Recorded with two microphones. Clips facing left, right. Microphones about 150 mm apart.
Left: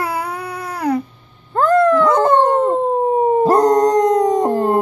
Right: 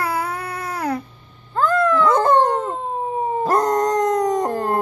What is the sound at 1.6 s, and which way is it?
Dog, 65° left (ahead or behind).